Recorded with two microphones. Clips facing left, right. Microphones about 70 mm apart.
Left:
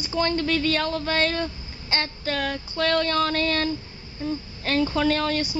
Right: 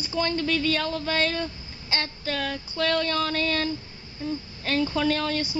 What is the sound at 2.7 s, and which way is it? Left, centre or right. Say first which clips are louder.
Female singing: left 2 dB; left.